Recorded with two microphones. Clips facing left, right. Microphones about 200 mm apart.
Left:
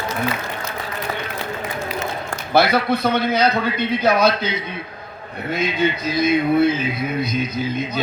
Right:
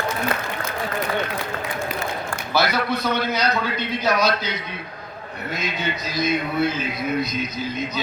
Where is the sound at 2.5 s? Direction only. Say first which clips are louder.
Left 5 dB; 55° left (ahead or behind).